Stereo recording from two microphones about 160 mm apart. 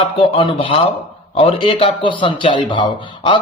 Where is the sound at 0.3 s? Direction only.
35° left (ahead or behind).